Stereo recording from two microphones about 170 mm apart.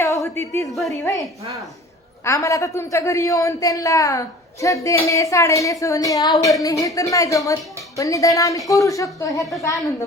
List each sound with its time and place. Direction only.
0.0 s a sound: 15° left (ahead or behind)
0.7 s a woman's voice: centre (ahead or behind)
1.0 s a woman's voice: 20° left (ahead or behind)